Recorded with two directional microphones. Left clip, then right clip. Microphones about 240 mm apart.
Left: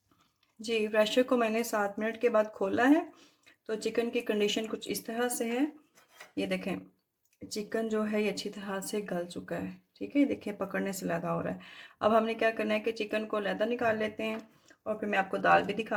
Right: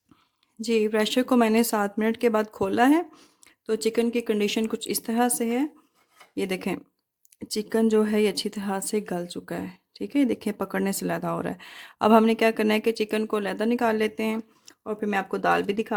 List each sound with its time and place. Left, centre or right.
0.6 s speech: right